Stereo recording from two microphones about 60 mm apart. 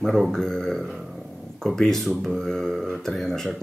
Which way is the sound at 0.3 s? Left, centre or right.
Centre.